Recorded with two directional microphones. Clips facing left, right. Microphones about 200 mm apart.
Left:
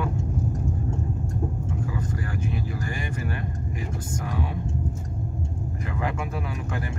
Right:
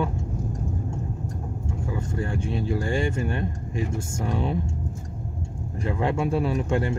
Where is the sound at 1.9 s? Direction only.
30° right (ahead or behind).